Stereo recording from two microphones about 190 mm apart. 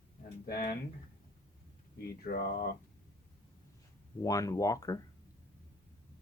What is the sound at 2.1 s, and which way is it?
Speech, 50° left (ahead or behind).